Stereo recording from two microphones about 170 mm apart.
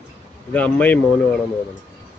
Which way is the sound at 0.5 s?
10° left (ahead or behind).